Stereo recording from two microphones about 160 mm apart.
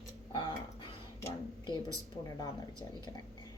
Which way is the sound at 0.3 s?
30° left (ahead or behind).